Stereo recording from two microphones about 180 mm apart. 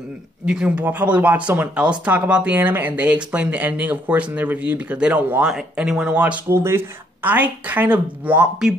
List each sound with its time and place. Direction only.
0.5 s speech: 5° right (ahead or behind)